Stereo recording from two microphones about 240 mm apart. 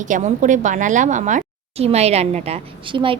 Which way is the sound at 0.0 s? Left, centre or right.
Right.